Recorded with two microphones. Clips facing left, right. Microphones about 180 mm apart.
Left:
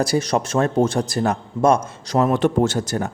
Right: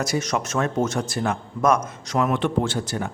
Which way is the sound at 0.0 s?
35° left (ahead or behind).